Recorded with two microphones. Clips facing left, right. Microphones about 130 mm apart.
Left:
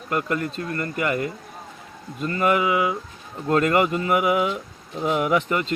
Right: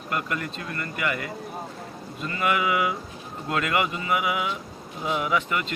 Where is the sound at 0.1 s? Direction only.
35° left (ahead or behind).